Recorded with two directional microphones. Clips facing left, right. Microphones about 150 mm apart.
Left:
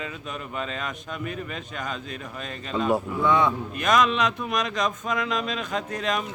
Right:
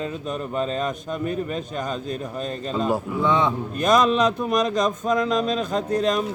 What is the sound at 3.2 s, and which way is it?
Speech, 20° right (ahead or behind).